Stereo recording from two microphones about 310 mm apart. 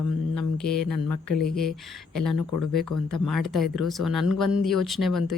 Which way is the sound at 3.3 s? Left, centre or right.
Centre.